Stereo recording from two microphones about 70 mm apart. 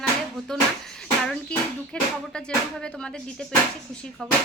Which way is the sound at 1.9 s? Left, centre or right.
Centre.